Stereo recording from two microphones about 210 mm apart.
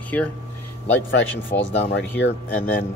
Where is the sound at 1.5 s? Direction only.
35° left (ahead or behind).